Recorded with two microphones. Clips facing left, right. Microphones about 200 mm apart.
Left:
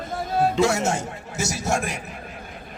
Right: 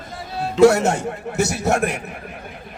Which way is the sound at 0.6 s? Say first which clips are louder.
Right 8 dB; 65° right (ahead or behind).